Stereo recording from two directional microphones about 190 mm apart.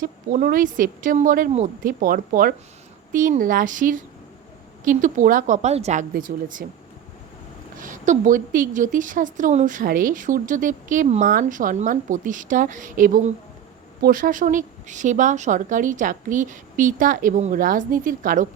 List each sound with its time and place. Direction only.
0.0 s a woman's voice: 45° right (ahead or behind)
7.8 s a woman's voice: 45° right (ahead or behind)